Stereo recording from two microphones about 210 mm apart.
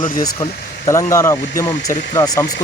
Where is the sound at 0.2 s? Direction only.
15° left (ahead or behind).